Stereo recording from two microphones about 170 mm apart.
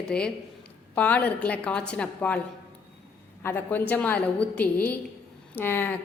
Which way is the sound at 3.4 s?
15° left (ahead or behind).